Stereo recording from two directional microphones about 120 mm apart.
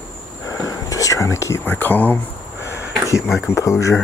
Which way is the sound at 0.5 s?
25° left (ahead or behind).